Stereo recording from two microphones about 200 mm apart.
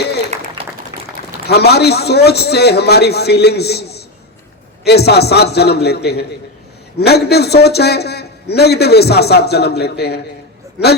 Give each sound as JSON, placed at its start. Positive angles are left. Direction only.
{"t": 0.3, "sound": "applause", "side_deg": -35}
{"t": 1.5, "sound": "a man's voice", "side_deg": 55}